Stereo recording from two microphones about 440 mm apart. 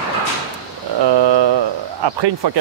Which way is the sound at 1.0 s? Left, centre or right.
Right.